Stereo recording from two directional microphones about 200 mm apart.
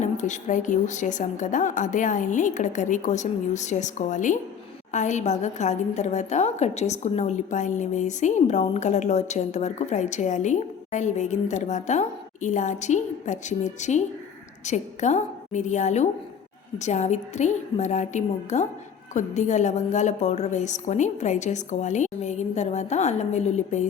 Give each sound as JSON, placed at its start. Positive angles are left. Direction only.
{"t": 0.0, "sound": "a woman's voice", "side_deg": 35}